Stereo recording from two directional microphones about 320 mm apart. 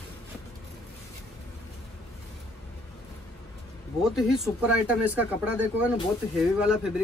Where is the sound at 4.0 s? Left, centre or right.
Centre.